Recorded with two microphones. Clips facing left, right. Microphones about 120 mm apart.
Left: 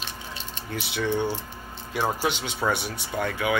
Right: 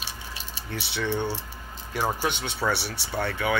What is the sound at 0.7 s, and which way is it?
Speech, 10° left (ahead or behind).